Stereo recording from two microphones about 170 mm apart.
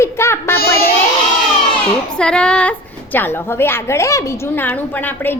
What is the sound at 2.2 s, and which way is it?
A woman's voice, 5° left (ahead or behind).